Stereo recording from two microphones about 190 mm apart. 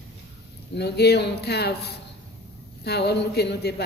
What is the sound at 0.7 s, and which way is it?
Speech, 60° left (ahead or behind).